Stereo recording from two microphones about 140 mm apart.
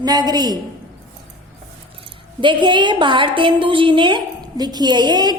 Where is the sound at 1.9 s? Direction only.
35° right (ahead or behind).